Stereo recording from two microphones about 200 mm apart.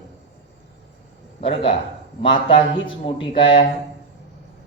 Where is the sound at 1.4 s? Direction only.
30° left (ahead or behind).